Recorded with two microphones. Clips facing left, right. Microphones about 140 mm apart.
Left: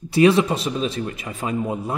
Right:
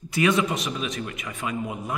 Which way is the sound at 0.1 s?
30° left (ahead or behind).